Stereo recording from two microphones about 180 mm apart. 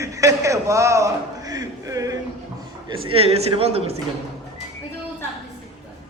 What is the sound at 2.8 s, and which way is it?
A man's voice, 30° right (ahead or behind).